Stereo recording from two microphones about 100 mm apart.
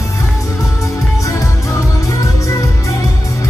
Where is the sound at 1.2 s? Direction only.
35° left (ahead or behind).